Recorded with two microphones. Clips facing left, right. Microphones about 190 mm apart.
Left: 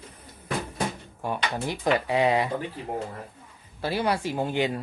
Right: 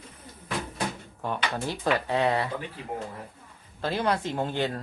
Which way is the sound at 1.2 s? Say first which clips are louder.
Left 1 dB; 10° left (ahead or behind).